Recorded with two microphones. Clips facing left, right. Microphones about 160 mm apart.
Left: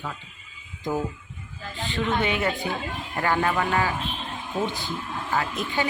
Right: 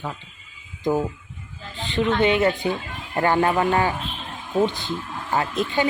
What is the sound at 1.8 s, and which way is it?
A woman's voice, 20° right (ahead or behind).